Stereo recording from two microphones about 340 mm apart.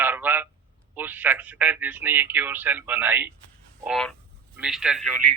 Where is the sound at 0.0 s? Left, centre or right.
Centre.